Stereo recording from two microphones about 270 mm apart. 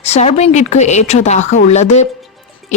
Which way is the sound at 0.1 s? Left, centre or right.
Left.